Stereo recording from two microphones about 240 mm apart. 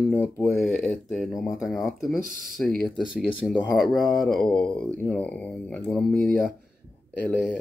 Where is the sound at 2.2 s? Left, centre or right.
Right.